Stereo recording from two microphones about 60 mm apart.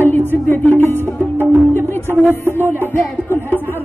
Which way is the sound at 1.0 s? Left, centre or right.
Right.